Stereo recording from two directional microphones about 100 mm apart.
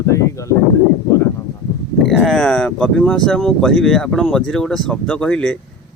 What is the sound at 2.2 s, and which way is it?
Speech, 5° left (ahead or behind).